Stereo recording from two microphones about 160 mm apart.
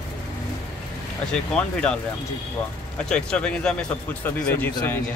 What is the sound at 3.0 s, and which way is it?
Speech, 5° left (ahead or behind).